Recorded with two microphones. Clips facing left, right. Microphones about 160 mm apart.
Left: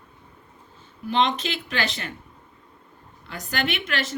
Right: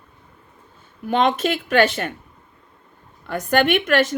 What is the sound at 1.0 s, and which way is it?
Speech, 50° right (ahead or behind).